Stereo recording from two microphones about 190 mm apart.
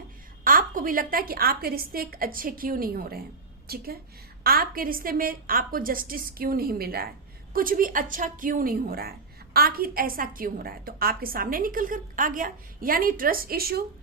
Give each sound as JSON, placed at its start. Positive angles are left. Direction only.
{"t": 0.4, "sound": "a woman's voice", "side_deg": -45}